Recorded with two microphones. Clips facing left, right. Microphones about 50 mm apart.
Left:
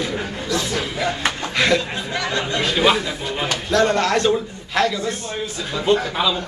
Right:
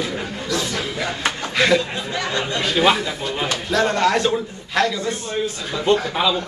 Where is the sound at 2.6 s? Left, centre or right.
Centre.